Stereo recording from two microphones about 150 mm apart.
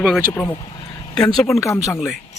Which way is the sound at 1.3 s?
Centre (ahead or behind).